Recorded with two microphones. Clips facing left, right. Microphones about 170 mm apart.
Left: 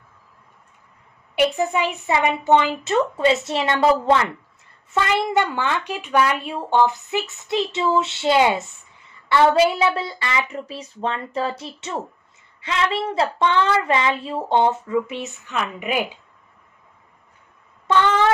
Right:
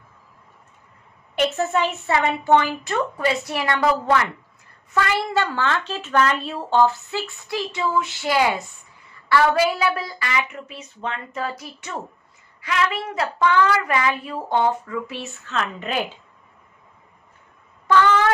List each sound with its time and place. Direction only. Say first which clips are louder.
1.3 s a woman's voice: left 1 dB; 10° left (ahead or behind)